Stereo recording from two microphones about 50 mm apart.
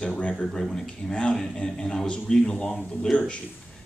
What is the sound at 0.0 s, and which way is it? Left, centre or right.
Speech, left.